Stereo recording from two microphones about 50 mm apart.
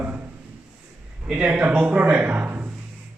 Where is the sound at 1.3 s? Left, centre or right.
Right.